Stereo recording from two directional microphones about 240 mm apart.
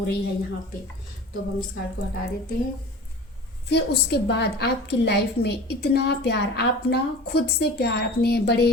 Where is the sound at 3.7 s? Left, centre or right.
Left.